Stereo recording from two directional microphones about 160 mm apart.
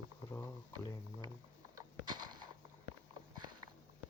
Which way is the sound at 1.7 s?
25° right (ahead or behind).